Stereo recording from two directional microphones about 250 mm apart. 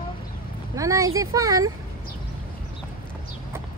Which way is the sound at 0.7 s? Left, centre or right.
Centre.